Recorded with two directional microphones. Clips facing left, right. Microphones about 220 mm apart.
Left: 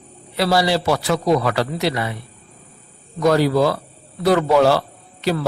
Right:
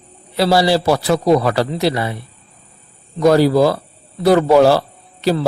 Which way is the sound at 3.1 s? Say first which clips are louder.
Right 4 dB; 35° right (ahead or behind).